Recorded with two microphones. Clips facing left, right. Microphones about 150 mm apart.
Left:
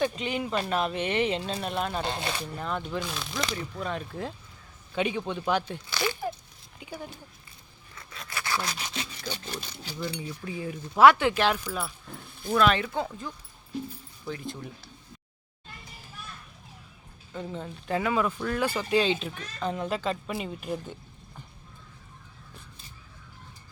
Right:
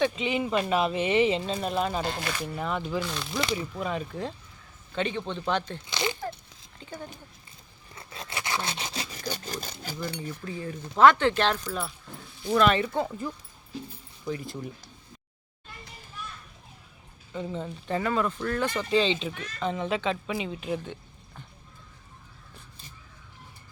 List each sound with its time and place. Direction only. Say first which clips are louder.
0.0 s speech: right 2 dB; centre (ahead or behind)
2.0 s speech: even; 25° left (ahead or behind)
2.6 s speech: right 4 dB; 5° right (ahead or behind)
5.9 s a sound: even; 20° right (ahead or behind)
6.7 s speech: left 1 dB; 10° left (ahead or behind)
7.9 s sawing: right 2 dB; 25° right (ahead or behind)
9.3 s roaring cats: right 2 dB; 40° right (ahead or behind)
10.2 s speech: even; 10° left (ahead or behind)
17.3 s speech: right 3 dB; centre (ahead or behind)